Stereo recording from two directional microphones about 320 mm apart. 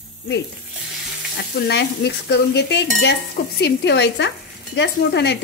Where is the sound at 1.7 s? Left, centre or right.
Left.